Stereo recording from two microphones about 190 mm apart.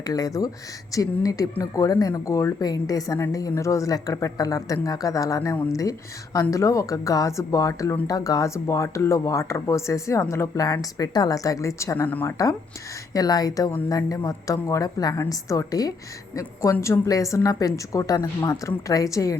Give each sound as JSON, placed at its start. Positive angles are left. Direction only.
{"t": 0.0, "sound": "a woman's voice", "side_deg": 20}